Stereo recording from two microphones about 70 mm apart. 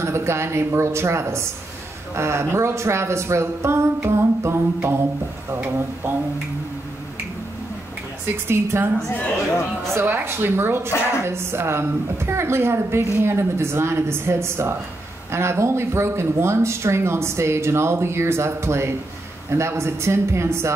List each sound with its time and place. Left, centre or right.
0.0 s speech: right
8.5 s speech: right
9.4 s speech: centre
9.9 s speech: right